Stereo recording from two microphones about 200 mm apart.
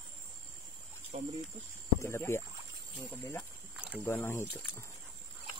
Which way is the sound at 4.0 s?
10° left (ahead or behind).